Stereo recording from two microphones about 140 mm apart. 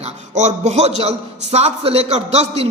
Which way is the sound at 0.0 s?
55° right (ahead or behind).